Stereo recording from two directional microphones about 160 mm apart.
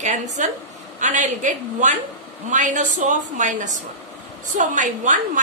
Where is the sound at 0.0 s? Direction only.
50° right (ahead or behind).